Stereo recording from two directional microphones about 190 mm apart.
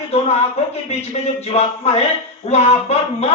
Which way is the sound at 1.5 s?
30° left (ahead or behind).